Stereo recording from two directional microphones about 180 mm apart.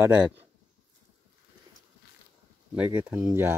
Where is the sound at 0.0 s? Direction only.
10° right (ahead or behind).